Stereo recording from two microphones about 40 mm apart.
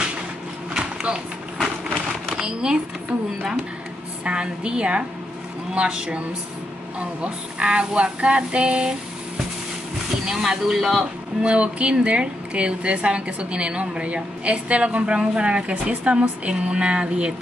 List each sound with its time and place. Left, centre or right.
0.7 s a sound: right
2.3 s speech: centre
4.2 s a woman's voice: right
10.2 s speech: centre
11.4 s a woman's voice: right